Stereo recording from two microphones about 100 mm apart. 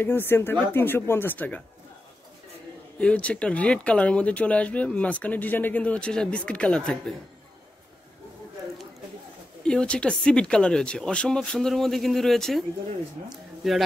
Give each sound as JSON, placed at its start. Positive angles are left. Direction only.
{"t": 0.0, "sound": "speech", "side_deg": 20}
{"t": 3.0, "sound": "speech", "side_deg": 10}
{"t": 9.6, "sound": "speech", "side_deg": 10}